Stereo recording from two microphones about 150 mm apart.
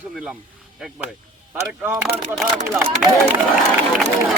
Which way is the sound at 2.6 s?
15° right (ahead or behind).